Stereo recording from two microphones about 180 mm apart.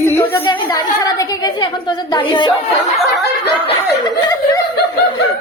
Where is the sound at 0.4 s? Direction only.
25° left (ahead or behind).